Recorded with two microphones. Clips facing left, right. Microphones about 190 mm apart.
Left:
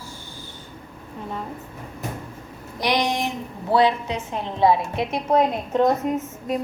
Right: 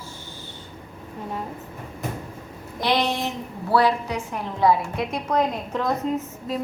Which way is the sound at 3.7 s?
20° left (ahead or behind).